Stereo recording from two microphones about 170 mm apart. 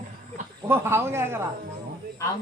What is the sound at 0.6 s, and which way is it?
Speech, 15° right (ahead or behind).